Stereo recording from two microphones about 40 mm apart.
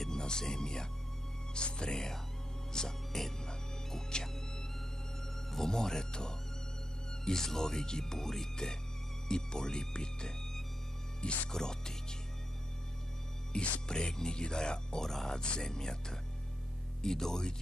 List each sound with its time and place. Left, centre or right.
0.0 s music: centre
1.5 s speech: left
2.7 s music: centre
7.2 s speech: centre
11.1 s speech: left
11.5 s speech: centre
13.5 s speech: left